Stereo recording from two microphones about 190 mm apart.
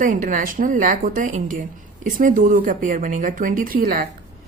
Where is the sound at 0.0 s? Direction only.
45° right (ahead or behind).